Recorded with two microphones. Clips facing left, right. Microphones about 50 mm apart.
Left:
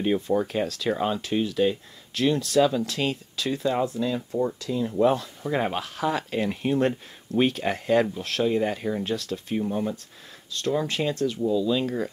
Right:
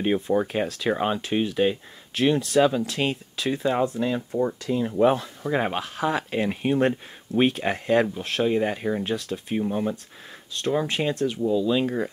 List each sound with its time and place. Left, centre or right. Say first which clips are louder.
0.0 s speech: right 1 dB; right
4.0 s speech: right 1 dB; right
5.0 s speech: right 1 dB; centre